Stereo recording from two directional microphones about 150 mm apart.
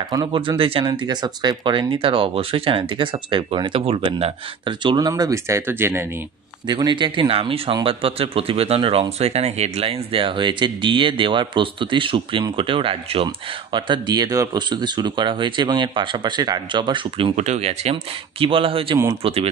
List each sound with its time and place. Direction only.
0.1 s speech: 30° right (ahead or behind)
6.7 s speech: 30° right (ahead or behind)
17.4 s speech: 45° right (ahead or behind)